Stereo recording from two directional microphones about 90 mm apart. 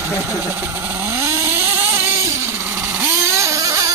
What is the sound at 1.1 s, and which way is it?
Vehicle, 35° right (ahead or behind).